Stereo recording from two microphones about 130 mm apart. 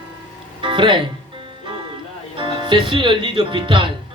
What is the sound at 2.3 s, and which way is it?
Speech, 40° right (ahead or behind).